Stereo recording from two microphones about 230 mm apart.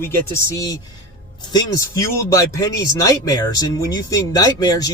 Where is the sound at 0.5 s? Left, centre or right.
Centre.